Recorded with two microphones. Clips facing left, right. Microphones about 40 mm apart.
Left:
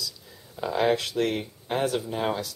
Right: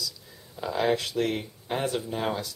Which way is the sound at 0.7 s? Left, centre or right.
Left.